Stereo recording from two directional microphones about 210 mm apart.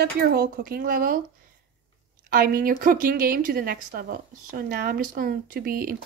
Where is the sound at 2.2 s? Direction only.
45° right (ahead or behind).